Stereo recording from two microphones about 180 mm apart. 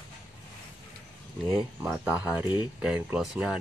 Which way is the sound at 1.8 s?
5° right (ahead or behind).